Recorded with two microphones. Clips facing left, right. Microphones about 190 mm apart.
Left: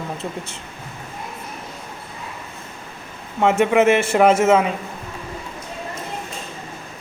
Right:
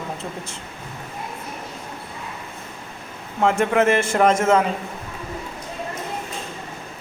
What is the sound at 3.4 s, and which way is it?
A man's voice, 5° left (ahead or behind).